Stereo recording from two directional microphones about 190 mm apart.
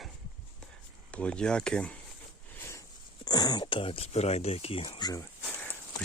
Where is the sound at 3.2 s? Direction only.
20° left (ahead or behind).